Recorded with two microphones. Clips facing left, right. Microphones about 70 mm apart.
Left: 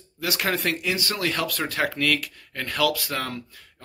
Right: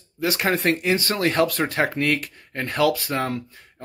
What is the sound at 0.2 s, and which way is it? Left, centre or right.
Speech, right.